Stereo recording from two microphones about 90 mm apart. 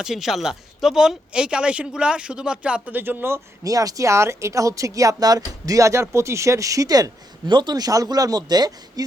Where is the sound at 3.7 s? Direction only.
40° right (ahead or behind).